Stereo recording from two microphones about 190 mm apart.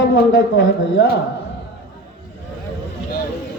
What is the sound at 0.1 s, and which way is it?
Speech, 60° left (ahead or behind).